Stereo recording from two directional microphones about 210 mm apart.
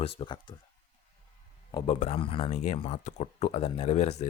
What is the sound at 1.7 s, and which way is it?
Speech, 30° left (ahead or behind).